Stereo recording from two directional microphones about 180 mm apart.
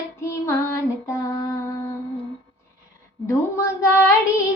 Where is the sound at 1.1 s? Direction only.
20° left (ahead or behind).